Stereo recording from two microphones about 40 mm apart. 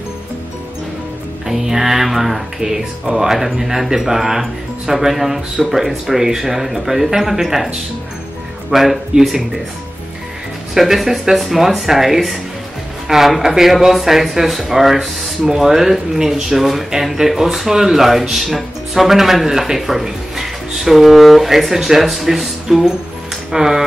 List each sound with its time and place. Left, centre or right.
1.5 s speech: centre
9.1 s speech: right
10.7 s speech: centre